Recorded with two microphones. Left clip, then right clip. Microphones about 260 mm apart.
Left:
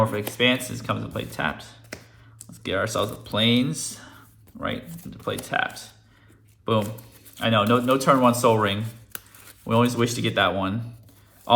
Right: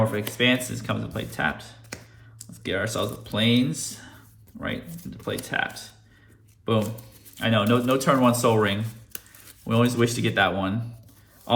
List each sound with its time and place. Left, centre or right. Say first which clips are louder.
0.0 s speech: left 1 dB; centre
3.8 s a sound: left 1 dB; centre
4.6 s speech: left 2 dB; centre
7.3 s speech: left 2 dB; centre